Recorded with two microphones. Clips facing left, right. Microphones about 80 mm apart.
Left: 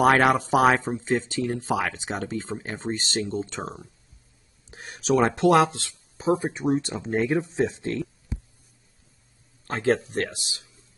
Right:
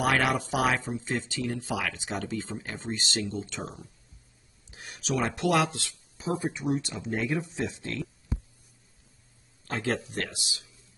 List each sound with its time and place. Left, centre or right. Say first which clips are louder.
0.0 s speech: left 7 dB; left
9.7 s speech: left 7 dB; left